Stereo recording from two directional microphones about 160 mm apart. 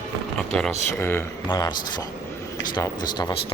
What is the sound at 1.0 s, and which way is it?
Speech, 15° left (ahead or behind).